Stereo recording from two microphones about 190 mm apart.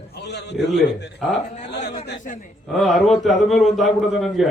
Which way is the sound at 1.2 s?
Centre (ahead or behind).